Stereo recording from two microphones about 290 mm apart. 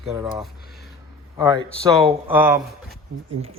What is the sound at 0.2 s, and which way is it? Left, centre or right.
Speech, centre.